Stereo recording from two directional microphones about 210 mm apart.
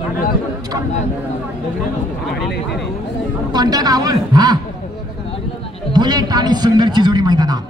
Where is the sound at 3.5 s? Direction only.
20° right (ahead or behind).